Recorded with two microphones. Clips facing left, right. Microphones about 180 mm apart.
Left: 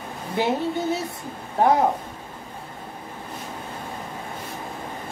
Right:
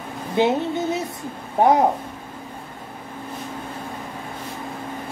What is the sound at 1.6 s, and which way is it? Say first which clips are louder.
Speech: right 2 dB; 20° right (ahead or behind).